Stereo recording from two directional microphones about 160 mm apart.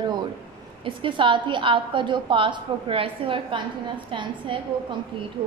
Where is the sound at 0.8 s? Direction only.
30° right (ahead or behind).